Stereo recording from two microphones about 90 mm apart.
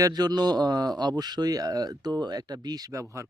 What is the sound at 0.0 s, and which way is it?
Speech, 45° right (ahead or behind).